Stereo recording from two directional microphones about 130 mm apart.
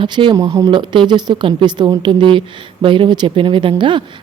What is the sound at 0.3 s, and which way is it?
Speech, 25° right (ahead or behind).